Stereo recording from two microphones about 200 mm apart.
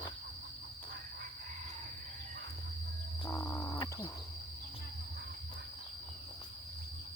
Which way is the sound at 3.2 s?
15° left (ahead or behind).